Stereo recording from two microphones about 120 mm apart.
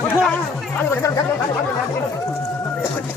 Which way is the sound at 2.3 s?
20° left (ahead or behind).